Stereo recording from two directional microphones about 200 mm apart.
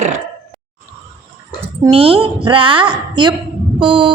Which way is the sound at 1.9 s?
30° right (ahead or behind).